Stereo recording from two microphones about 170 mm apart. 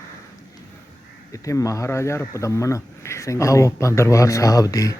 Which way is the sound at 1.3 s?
20° left (ahead or behind).